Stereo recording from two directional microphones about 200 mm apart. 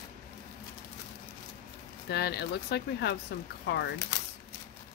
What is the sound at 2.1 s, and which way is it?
Speech, 55° left (ahead or behind).